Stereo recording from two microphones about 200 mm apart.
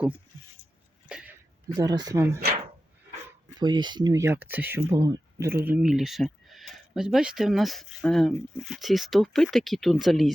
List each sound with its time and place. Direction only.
1.0 s a sound: 5° right (ahead or behind)
1.7 s speech: 20° right (ahead or behind)
3.6 s speech: 20° right (ahead or behind); by 10.3 s centre (ahead or behind)